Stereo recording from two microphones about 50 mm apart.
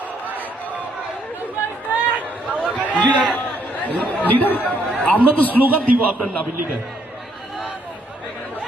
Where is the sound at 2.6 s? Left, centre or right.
Centre.